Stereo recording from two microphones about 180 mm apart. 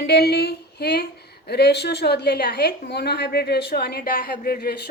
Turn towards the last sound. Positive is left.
turn(degrees=55)  # may be behind; listen again after turning